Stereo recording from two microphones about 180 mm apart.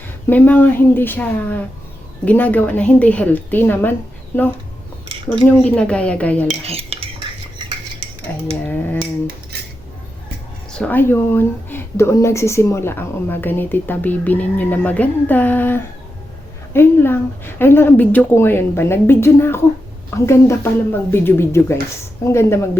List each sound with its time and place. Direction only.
0.3 s speech: 10° left (ahead or behind)
5.3 s speech: 5° left (ahead or behind)
6.7 s stir: 35° right (ahead or behind)
8.6 s speech: 10° left (ahead or behind)
10.7 s speech: 5° left (ahead or behind)